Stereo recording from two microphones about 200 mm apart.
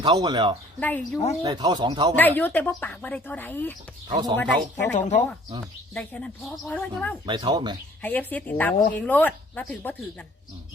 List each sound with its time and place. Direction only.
0.0 s speech: 20° right (ahead or behind)
0.8 s a woman's voice: 10° left (ahead or behind)
1.4 s speech: 20° right (ahead or behind)
2.1 s a woman's voice: 10° left (ahead or behind)
4.1 s speech: 20° right (ahead or behind)
4.4 s a woman's voice: 15° left (ahead or behind)
4.9 s speech: 35° left (ahead or behind)
5.9 s speech: 5° left (ahead or behind)
7.3 s speech: 20° right (ahead or behind)
8.0 s a woman's voice: 10° left (ahead or behind)